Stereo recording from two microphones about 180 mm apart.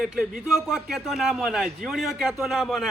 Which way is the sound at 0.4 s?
Centre (ahead or behind).